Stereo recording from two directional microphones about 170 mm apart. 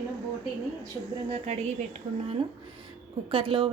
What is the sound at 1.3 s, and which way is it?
Speech, 45° right (ahead or behind).